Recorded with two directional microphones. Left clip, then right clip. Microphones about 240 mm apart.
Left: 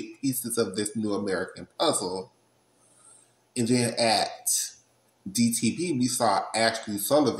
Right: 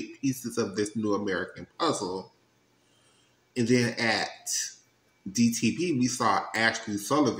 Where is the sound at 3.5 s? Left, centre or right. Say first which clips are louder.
Even; centre.